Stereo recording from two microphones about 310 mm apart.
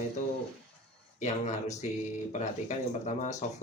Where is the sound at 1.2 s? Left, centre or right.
Left.